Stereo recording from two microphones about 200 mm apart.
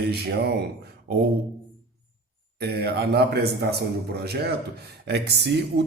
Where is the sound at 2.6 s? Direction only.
55° right (ahead or behind).